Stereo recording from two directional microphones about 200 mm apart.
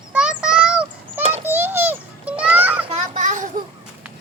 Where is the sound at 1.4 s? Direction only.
10° right (ahead or behind).